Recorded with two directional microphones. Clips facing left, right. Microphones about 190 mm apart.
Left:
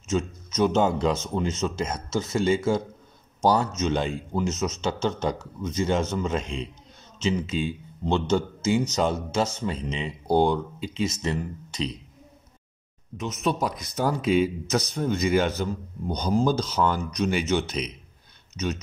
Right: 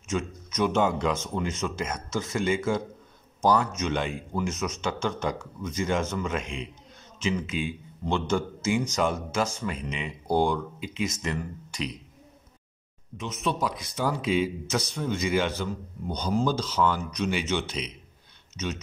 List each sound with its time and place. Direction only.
0.1 s speech: 25° left (ahead or behind)
13.2 s a man's voice: 40° left (ahead or behind)